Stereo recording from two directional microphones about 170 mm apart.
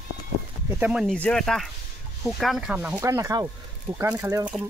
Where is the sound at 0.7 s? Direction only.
10° right (ahead or behind).